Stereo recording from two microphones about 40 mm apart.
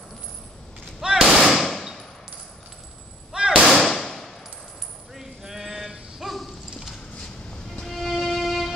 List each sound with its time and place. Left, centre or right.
1.1 s a sound: centre
3.3 s a sound: right
3.6 s firecracker: centre
5.1 s sheep: centre
6.2 s clip-clop: centre
7.9 s music: centre